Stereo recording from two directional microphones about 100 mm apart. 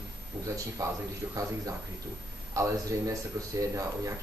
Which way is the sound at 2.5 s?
35° right (ahead or behind).